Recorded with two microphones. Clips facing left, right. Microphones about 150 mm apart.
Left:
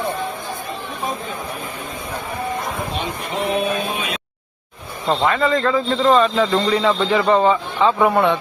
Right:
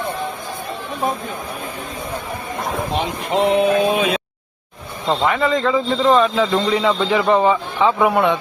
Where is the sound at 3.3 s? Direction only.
90° right.